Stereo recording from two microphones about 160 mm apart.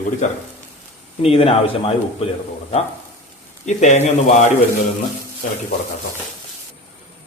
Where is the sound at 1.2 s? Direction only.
35° left (ahead or behind).